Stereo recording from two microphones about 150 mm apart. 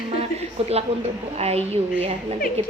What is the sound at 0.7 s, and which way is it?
A woman's voice, 45° right (ahead or behind).